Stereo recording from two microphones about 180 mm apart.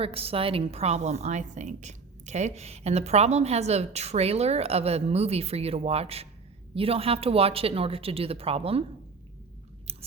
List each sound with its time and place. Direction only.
0.0 s a woman's voice: 35° right (ahead or behind)
9.9 s chewing: 35° right (ahead or behind)